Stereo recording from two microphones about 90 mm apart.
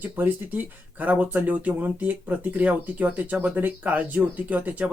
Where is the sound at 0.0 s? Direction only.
20° right (ahead or behind).